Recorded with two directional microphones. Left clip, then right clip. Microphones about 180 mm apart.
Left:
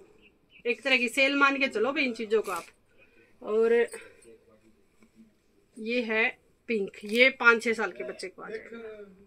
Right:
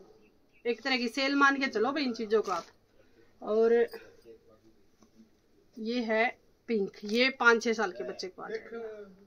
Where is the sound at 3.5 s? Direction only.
35° right (ahead or behind).